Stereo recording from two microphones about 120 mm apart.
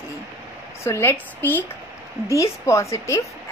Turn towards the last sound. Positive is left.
turn(degrees=25)  # may be behind; listen again after turning